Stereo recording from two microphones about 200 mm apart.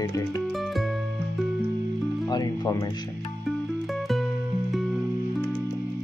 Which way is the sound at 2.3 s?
20° left (ahead or behind).